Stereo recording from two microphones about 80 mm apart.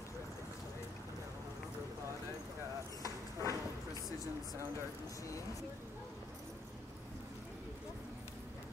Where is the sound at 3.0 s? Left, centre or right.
Left.